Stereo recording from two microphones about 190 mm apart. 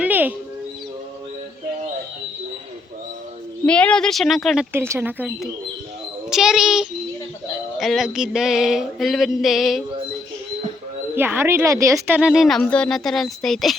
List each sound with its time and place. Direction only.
0.0 s music: 10° right (ahead or behind)
3.7 s speech: 5° left (ahead or behind)
4.7 s speech: 10° right (ahead or behind)
11.1 s speech: 10° right (ahead or behind)